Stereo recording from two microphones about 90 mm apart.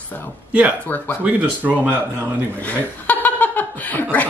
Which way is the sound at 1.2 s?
20° right (ahead or behind).